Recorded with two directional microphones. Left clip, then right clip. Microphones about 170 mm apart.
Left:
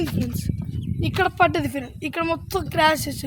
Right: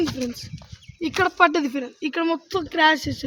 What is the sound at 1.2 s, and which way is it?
A woman's voice, 40° left (ahead or behind).